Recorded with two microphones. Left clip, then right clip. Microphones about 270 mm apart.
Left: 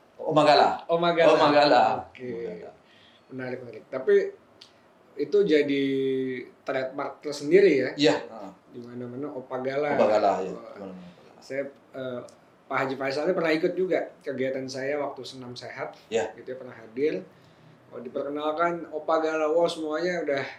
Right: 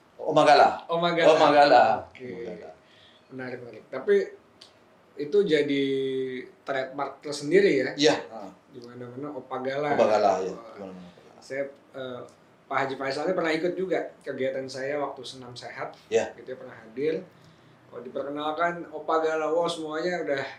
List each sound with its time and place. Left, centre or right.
0.3 s a man's voice: centre
0.9 s speech: left
1.2 s a man's voice: centre
3.3 s speech: left
7.9 s a man's voice: right
9.5 s speech: left
10.0 s a man's voice: right
11.4 s speech: left
16.0 s a man's voice: centre
16.5 s speech: left